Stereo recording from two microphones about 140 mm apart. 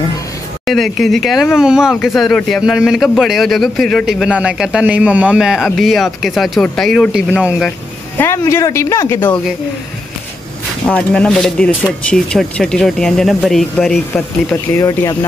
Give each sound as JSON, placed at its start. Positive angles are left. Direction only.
{"t": 0.7, "sound": "speech", "side_deg": 0}
{"t": 8.2, "sound": "speech", "side_deg": 20}
{"t": 10.9, "sound": "speech", "side_deg": 10}
{"t": 14.1, "sound": "speech", "side_deg": 20}